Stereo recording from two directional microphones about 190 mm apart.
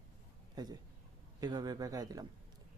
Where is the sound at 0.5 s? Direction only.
20° right (ahead or behind).